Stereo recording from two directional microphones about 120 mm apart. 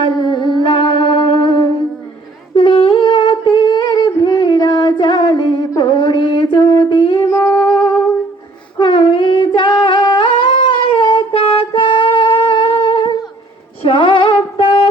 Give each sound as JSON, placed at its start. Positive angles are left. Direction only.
{"t": 0.0, "sound": "music", "side_deg": 40}
{"t": 2.6, "sound": "humming", "side_deg": 40}
{"t": 8.8, "sound": "singing", "side_deg": 40}
{"t": 13.8, "sound": "music", "side_deg": 40}